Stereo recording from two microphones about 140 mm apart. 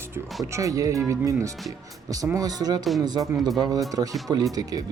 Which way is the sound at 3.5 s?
30° right (ahead or behind).